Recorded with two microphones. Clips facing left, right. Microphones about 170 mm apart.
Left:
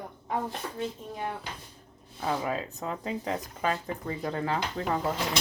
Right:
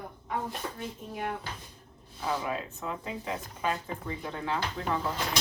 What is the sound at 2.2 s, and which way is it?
Speech, 40° left (ahead or behind).